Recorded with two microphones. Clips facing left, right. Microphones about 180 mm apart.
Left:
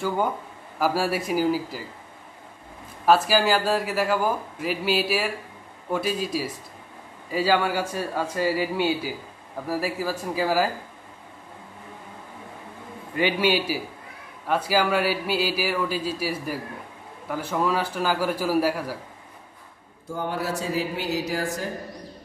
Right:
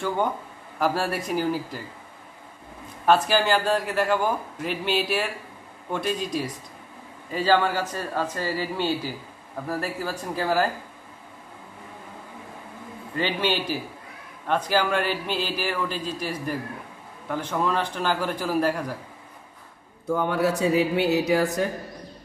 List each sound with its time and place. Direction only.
0.7 s a man's voice: 5° left (ahead or behind)
3.1 s a man's voice: 5° left (ahead or behind)
13.1 s a man's voice: 10° left (ahead or behind)
20.1 s speech: 65° right (ahead or behind)